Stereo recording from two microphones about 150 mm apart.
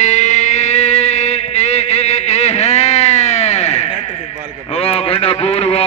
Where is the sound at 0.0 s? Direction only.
50° left (ahead or behind).